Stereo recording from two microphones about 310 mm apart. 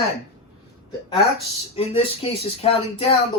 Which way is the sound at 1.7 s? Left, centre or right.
Centre.